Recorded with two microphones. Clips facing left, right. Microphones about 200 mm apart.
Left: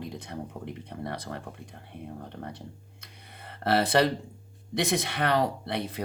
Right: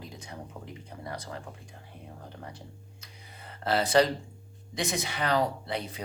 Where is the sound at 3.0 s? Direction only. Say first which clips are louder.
Left 2 dB; 60° left (ahead or behind).